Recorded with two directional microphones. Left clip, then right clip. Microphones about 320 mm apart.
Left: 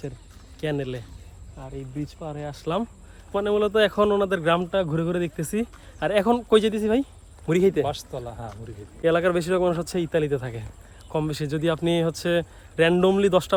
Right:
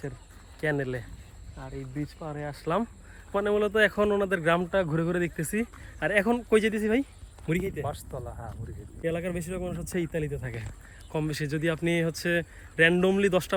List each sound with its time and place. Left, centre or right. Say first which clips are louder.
0.6 s speech: left 1 dB; centre
7.9 s speech: left 6 dB; centre
9.0 s speech: left 10 dB; centre